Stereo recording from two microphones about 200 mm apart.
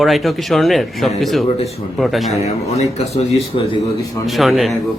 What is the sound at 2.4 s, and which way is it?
Speech, 30° left (ahead or behind).